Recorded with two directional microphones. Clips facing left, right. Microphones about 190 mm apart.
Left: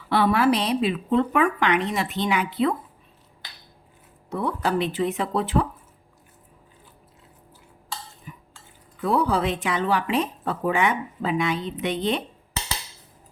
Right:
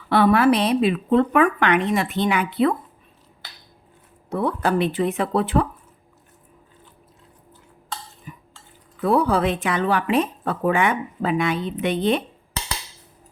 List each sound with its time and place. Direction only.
0.1 s a woman's voice: 55° right (ahead or behind)
4.3 s a woman's voice: 55° right (ahead or behind)
9.0 s a woman's voice: 55° right (ahead or behind)